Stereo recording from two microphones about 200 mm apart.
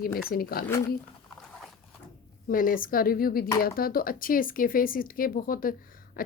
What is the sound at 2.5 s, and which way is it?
A woman's voice, 45° left (ahead or behind).